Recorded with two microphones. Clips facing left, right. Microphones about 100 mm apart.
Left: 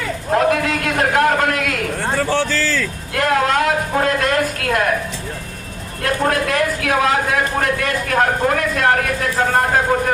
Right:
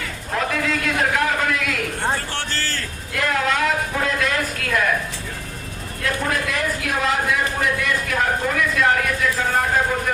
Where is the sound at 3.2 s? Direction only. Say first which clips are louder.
Left 5 dB; 55° left (ahead or behind).